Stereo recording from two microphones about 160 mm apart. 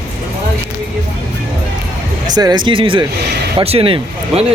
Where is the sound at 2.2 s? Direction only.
25° right (ahead or behind).